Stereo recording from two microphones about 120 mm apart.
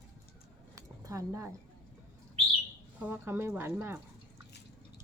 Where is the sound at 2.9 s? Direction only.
15° right (ahead or behind).